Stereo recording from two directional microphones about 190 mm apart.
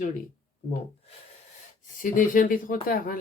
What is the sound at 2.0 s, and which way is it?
Speech, 45° left (ahead or behind).